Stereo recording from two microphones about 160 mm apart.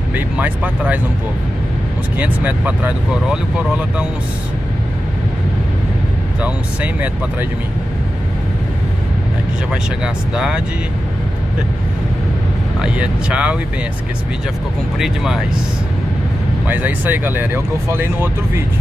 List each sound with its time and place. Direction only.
2.1 s speech: 10° right (ahead or behind)
6.4 s speech: 10° right (ahead or behind)
9.7 s speech: 5° right (ahead or behind)
12.8 s speech: 5° right (ahead or behind)
15.0 s speech: 5° right (ahead or behind)
16.6 s speech: 10° right (ahead or behind)